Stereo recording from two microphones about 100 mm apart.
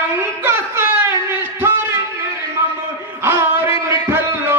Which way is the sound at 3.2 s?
25° right (ahead or behind).